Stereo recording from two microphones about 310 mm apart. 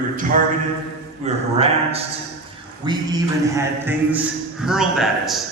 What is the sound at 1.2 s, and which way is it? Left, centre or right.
A man's voice, right.